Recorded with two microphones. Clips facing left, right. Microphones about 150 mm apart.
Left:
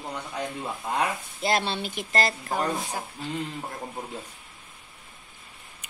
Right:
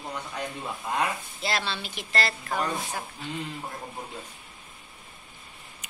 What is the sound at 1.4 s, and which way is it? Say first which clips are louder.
Speech: left 5 dB; 50° left (ahead or behind).